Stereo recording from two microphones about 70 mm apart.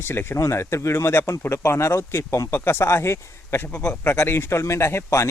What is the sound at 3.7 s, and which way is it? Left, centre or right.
Speech, centre.